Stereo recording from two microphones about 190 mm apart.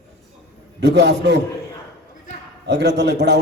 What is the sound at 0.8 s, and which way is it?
Speech, 65° right (ahead or behind).